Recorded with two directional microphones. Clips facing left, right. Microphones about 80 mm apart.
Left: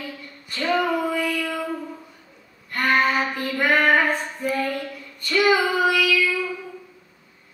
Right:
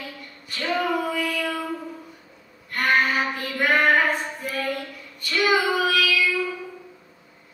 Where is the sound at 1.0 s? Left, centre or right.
Centre.